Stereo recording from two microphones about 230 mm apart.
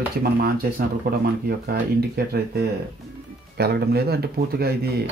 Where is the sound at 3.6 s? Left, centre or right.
Right.